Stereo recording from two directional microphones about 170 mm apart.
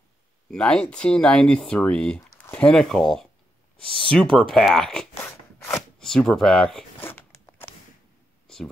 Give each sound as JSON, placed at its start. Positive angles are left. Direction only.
{"t": 0.5, "sound": "speech", "side_deg": 5}
{"t": 5.3, "sound": "scissors", "side_deg": 15}
{"t": 5.8, "sound": "speech", "side_deg": 5}
{"t": 7.1, "sound": "biting", "side_deg": 15}